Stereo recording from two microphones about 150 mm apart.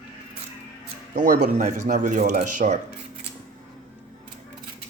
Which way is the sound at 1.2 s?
60° right (ahead or behind).